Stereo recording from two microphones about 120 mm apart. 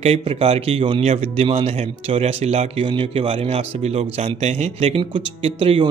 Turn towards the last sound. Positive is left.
turn(degrees=-50)  # may be behind; listen again after turning